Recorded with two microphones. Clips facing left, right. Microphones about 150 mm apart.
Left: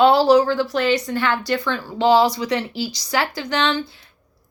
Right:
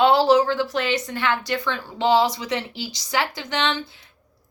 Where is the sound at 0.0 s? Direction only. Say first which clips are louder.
Left 2 dB; 25° right (ahead or behind).